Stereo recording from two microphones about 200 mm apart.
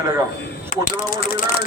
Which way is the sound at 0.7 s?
40° left (ahead or behind).